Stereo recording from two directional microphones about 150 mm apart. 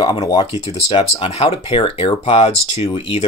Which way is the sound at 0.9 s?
40° left (ahead or behind).